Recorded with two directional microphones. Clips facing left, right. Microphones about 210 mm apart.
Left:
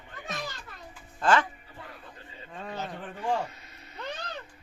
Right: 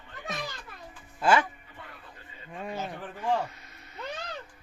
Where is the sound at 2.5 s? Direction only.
15° right (ahead or behind).